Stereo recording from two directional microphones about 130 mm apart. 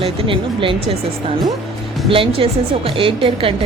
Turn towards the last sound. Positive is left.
turn(degrees=-45)  # may be behind; listen again after turning